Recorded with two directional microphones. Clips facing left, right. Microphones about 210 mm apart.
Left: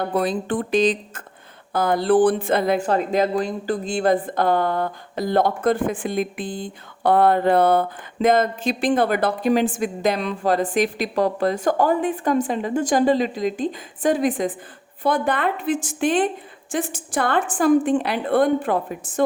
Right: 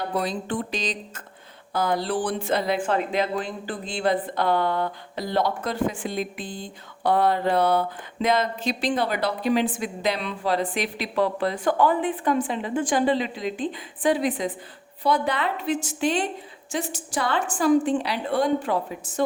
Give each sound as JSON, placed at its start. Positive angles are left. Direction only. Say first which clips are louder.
{"t": 0.0, "sound": "a woman's voice", "louder": "left 5 dB", "side_deg": 55}